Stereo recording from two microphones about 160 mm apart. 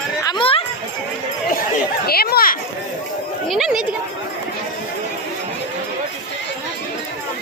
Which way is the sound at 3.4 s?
5° right (ahead or behind).